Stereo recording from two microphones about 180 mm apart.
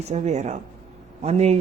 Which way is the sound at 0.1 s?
40° right (ahead or behind).